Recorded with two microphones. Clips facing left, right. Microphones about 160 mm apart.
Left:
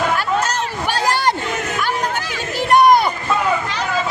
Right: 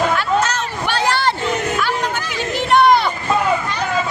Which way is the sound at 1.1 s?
45° left (ahead or behind).